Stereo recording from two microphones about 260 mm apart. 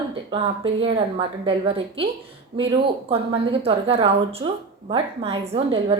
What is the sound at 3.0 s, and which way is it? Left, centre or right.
A woman's voice, right.